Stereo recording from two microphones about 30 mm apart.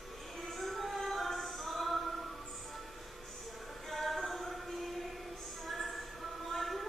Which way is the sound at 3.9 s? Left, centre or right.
Centre.